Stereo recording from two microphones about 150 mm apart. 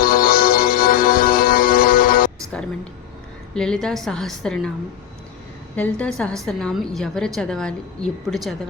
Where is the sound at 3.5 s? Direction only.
5° left (ahead or behind).